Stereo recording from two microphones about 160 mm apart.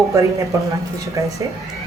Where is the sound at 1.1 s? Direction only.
20° right (ahead or behind).